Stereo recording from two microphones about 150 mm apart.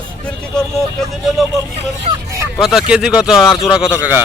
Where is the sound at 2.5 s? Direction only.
5° right (ahead or behind).